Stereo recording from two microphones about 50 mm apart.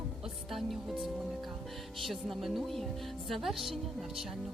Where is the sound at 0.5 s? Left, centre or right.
Centre.